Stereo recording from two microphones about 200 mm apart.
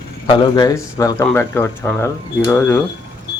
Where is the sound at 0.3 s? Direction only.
20° left (ahead or behind).